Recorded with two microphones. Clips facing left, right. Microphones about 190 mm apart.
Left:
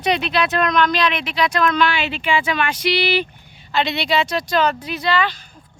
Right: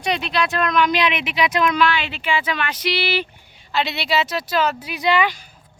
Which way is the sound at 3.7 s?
5° right (ahead or behind).